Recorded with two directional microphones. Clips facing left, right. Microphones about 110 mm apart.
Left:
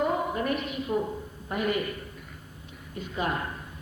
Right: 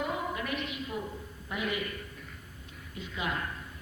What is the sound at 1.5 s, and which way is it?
Speech, 50° left (ahead or behind).